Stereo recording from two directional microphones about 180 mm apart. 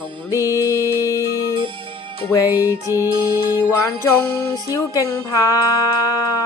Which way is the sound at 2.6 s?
15° left (ahead or behind).